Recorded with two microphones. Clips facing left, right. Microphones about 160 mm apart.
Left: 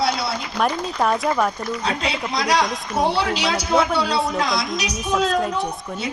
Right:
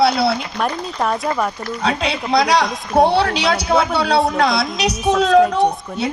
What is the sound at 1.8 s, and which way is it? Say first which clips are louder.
A woman's voice: right 6 dB; 70° right (ahead or behind).